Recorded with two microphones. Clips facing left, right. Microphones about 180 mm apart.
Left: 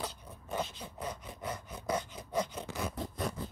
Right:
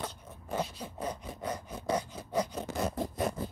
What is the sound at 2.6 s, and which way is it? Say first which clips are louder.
Zipper: right 5 dB; 45° right (ahead or behind).